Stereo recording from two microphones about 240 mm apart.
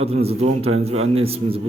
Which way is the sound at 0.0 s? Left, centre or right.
Right.